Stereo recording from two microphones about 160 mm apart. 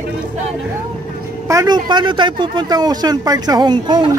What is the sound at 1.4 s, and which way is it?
A man's voice, 20° right (ahead or behind).